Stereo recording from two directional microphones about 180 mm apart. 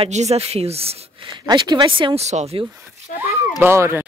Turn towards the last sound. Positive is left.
turn(degrees=-15)  # may be behind; listen again after turning